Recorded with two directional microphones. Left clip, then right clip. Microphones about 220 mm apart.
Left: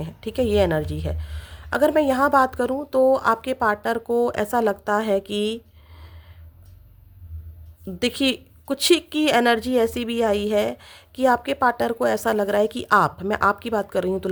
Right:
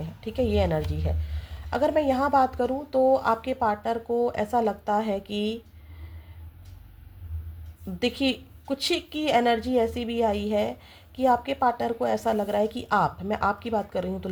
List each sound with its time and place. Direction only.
0.0 s a woman's voice: 35° left (ahead or behind)
7.9 s a woman's voice: 35° left (ahead or behind)